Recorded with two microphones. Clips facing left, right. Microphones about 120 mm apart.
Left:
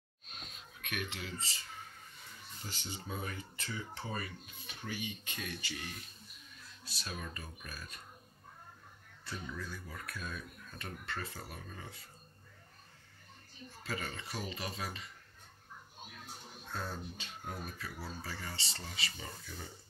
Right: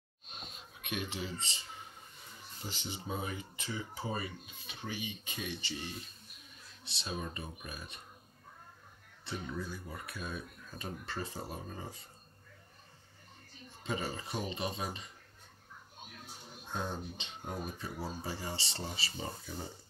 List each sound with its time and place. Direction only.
0.7 s speech: 20° right (ahead or behind)
5.7 s speech: 20° right (ahead or behind)
9.2 s speech: 25° right (ahead or behind); by 10.9 s 5° right (ahead or behind)
11.1 s speech: 25° right (ahead or behind)
13.8 s speech: 25° right (ahead or behind)
16.6 s speech: 20° right (ahead or behind)